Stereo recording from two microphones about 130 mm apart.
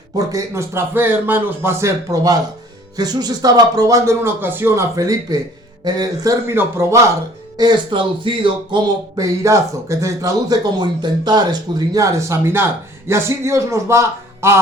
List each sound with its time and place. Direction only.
0.2 s speech: 25° right (ahead or behind)
6.5 s speech: 20° right (ahead or behind)
7.5 s speech: 35° right (ahead or behind)
9.1 s speech: 25° right (ahead or behind)